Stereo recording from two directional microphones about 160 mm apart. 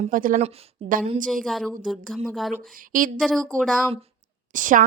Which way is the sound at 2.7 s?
55° right (ahead or behind).